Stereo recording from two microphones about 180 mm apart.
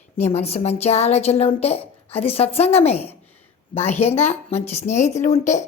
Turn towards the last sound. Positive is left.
turn(degrees=40)  # may be behind; listen again after turning